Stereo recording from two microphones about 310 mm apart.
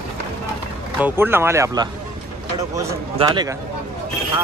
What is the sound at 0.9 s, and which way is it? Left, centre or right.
Speech, centre.